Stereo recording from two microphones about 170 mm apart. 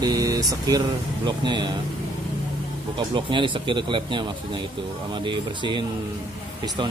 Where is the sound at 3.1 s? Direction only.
30° right (ahead or behind).